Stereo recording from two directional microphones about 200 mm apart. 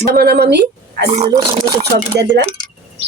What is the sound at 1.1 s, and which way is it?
Speech, 30° right (ahead or behind).